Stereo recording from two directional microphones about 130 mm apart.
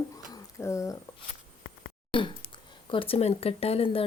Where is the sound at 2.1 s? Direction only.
40° left (ahead or behind).